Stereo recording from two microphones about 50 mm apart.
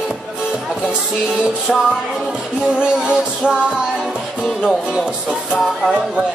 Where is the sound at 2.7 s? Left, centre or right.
Centre.